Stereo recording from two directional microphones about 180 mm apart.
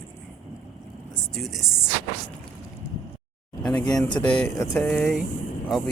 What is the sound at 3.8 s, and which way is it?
Speech, 20° left (ahead or behind).